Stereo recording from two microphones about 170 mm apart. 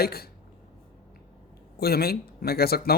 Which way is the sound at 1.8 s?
65° left (ahead or behind).